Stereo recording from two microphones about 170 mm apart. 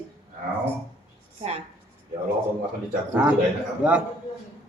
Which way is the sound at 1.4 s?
35° right (ahead or behind).